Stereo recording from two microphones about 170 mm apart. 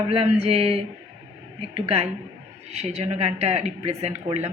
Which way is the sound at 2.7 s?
40° right (ahead or behind).